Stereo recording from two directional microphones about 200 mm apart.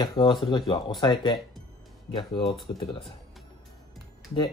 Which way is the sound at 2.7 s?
25° left (ahead or behind).